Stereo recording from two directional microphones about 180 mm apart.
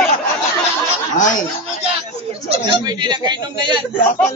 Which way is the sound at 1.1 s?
45° left (ahead or behind).